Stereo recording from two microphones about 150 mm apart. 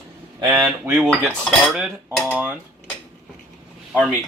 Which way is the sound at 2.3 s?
10° right (ahead or behind).